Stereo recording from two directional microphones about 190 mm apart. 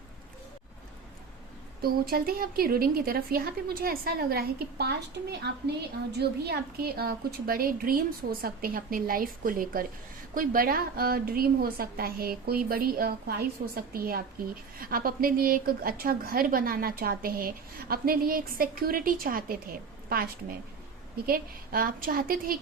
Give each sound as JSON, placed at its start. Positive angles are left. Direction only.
{"t": 1.8, "sound": "a woman's voice", "side_deg": -50}
{"t": 6.1, "sound": "a woman's voice", "side_deg": -55}